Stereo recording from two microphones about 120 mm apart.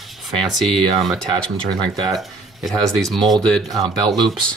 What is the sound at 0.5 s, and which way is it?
Speech, centre (ahead or behind).